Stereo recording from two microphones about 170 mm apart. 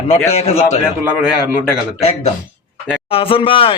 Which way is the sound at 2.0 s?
35° left (ahead or behind).